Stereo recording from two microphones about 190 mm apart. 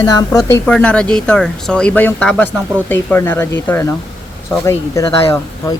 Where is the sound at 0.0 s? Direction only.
15° left (ahead or behind).